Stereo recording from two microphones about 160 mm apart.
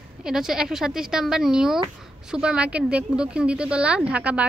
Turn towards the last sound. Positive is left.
turn(degrees=-10)  # may be behind; listen again after turning